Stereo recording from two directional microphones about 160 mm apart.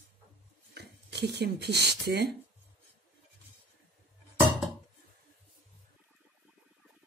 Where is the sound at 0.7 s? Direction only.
90° right.